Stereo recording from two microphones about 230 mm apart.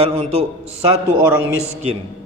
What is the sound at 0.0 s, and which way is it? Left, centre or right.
Mantra, right.